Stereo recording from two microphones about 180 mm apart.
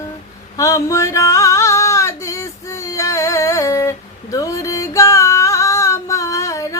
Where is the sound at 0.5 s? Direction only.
20° left (ahead or behind).